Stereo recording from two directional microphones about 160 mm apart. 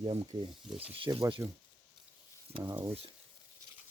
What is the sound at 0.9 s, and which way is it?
Speech, 35° right (ahead or behind).